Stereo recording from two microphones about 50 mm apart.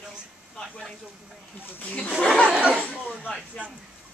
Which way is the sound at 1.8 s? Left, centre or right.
Left.